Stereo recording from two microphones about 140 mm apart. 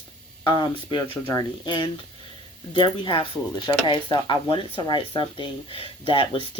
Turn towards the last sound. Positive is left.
turn(degrees=40)  # may be behind; listen again after turning